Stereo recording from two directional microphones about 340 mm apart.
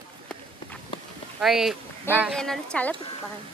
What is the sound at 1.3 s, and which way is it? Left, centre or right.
Female singing, centre.